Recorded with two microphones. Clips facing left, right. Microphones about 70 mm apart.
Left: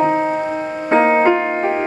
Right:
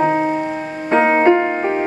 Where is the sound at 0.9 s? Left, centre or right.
Centre.